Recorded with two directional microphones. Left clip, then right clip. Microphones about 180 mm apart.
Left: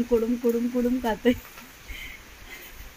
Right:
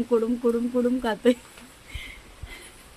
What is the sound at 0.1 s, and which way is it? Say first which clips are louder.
Speech: right 1 dB; 5° right (ahead or behind).